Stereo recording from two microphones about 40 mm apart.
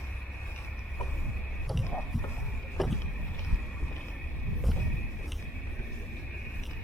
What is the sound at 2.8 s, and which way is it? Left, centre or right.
Vehicle, centre.